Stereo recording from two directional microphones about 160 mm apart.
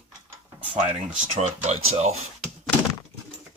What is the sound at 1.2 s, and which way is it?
Speech, 45° right (ahead or behind).